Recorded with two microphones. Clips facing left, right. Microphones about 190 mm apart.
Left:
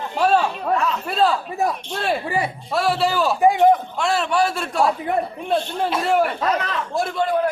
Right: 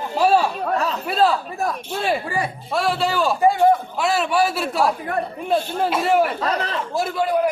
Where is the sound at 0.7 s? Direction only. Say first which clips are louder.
Left 1 dB; 35° right (ahead or behind).